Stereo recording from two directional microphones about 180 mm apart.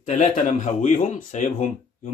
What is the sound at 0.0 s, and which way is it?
Speech, 45° left (ahead or behind).